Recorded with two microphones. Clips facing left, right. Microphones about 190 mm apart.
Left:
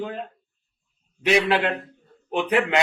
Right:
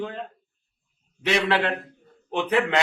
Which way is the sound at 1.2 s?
15° left (ahead or behind).